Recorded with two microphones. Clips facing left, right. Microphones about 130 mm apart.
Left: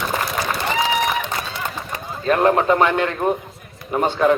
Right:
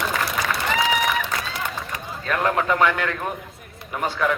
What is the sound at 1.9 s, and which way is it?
A man's voice, 30° left (ahead or behind).